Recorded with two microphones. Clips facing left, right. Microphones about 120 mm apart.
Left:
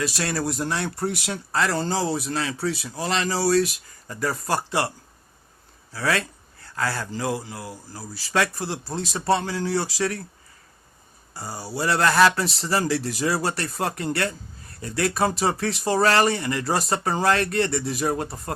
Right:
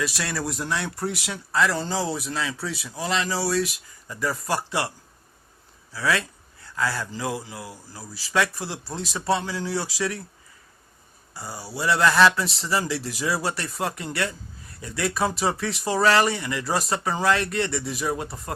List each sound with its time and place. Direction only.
0.0 s speech: 40° left (ahead or behind)
5.9 s speech: 40° left (ahead or behind)
11.3 s speech: 35° left (ahead or behind)